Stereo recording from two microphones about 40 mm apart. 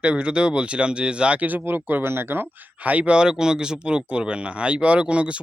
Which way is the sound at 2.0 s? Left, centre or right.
Right.